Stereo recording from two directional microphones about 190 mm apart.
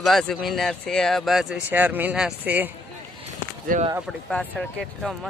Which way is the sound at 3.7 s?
45° right (ahead or behind).